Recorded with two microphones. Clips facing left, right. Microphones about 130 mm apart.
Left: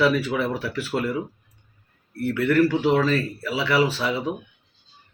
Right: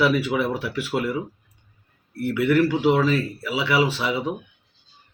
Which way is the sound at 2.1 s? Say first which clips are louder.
Even; 5° right (ahead or behind).